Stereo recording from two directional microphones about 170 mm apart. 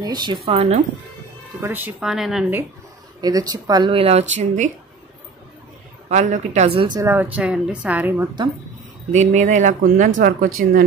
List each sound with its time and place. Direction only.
0.0 s speech: 25° right (ahead or behind)
1.6 s speech: 10° right (ahead or behind)
3.2 s speech: 20° right (ahead or behind)
6.0 s a woman's voice: 45° right (ahead or behind)
7.0 s a woman's voice: 10° right (ahead or behind)
9.1 s speech: 45° right (ahead or behind); by 10.9 s 60° right (ahead or behind)